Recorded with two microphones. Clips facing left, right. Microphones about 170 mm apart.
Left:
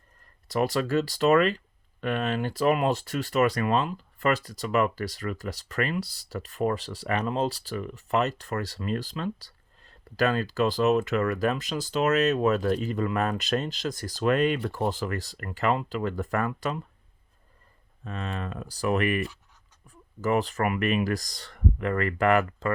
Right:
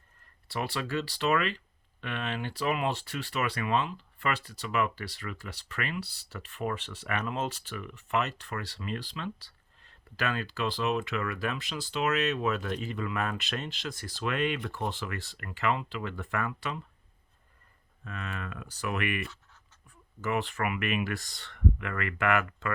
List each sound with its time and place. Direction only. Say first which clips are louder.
0.4 s speech: left 8 dB; 45° left (ahead or behind)
18.0 s speech: left 5 dB; 30° left (ahead or behind)